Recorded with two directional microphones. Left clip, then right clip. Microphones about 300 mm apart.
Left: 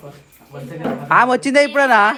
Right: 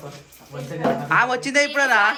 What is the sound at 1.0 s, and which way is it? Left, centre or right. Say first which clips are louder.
A man's voice: left 8 dB; centre.